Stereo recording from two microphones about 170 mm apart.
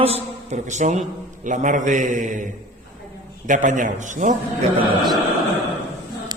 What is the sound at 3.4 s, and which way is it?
Speech, 50° right (ahead or behind).